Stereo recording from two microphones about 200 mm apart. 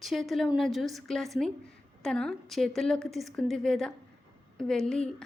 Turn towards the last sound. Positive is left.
turn(degrees=5)  # may be behind; listen again after turning